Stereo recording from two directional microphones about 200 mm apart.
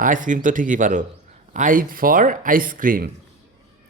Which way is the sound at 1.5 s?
40° right (ahead or behind).